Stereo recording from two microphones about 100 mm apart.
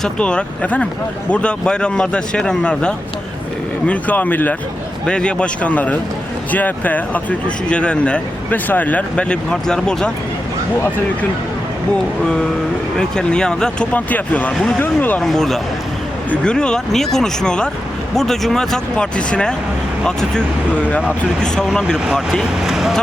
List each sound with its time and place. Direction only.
0.0 s speech: 10° left (ahead or behind)
13.0 s speech: 10° left (ahead or behind)
15.2 s speech: centre (ahead or behind)